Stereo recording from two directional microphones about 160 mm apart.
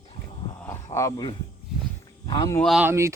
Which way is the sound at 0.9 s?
25° left (ahead or behind).